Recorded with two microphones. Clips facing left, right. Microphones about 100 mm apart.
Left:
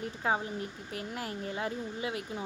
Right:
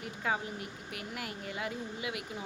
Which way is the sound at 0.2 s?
30° left (ahead or behind).